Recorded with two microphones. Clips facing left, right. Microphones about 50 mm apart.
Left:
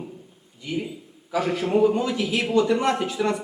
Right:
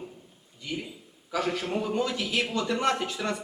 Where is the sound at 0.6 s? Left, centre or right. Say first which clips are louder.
Left 6 dB; centre.